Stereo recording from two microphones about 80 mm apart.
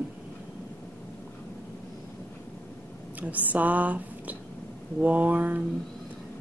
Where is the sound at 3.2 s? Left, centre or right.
Right.